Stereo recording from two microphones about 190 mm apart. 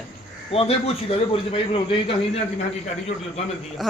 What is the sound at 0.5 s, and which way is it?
A man's voice, 30° left (ahead or behind).